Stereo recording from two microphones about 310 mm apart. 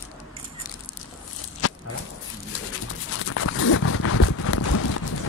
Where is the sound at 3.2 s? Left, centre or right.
Left.